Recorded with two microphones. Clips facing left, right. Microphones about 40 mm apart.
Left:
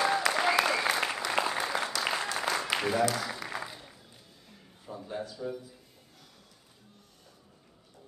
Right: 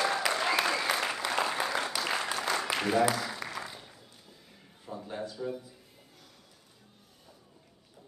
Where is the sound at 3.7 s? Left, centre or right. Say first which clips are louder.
Even; centre.